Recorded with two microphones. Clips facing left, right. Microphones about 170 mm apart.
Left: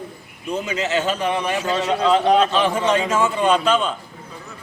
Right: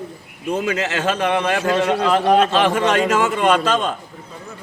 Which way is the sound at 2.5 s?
75° right (ahead or behind).